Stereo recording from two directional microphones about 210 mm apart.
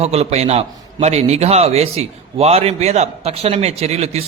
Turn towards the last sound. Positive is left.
turn(degrees=-30)  # may be behind; listen again after turning